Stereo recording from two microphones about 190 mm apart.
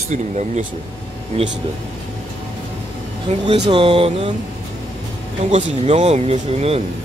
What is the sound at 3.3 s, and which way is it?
Speech, 35° right (ahead or behind).